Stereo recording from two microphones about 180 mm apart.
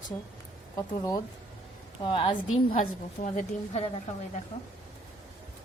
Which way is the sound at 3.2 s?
40° left (ahead or behind).